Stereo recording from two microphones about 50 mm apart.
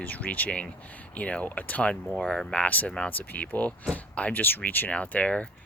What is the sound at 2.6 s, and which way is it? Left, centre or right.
Speech, left.